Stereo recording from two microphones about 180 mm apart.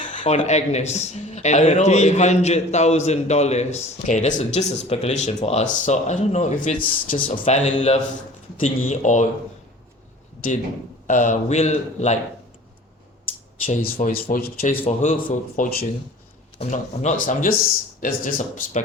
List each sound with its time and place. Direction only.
0.0 s speech: 45° left (ahead or behind)
11.0 s speech: 45° left (ahead or behind)
13.7 s a man's voice: 45° left (ahead or behind)